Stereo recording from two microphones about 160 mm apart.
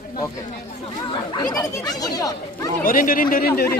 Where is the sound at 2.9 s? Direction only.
60° left (ahead or behind).